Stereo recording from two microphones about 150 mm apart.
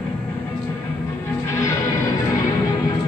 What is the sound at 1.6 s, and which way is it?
Music, 20° left (ahead or behind).